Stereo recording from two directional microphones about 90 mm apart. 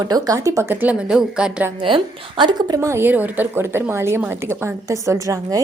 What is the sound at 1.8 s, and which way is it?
Speech, 70° right (ahead or behind).